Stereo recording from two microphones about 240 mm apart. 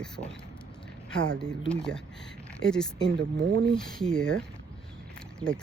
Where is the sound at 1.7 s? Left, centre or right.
Centre.